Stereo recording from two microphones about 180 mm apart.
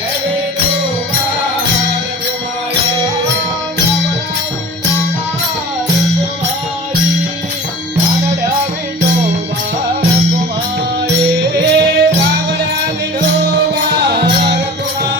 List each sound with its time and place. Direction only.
11.5 s music: 75° right (ahead or behind)
13.9 s music: 65° right (ahead or behind)